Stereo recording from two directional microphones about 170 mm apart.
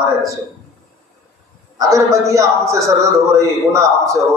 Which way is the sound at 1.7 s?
20° right (ahead or behind).